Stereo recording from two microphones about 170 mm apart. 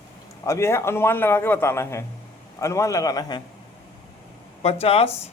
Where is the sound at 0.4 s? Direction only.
15° left (ahead or behind).